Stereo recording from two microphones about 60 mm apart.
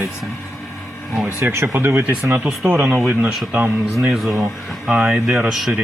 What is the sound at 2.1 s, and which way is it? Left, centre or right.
Speech, centre.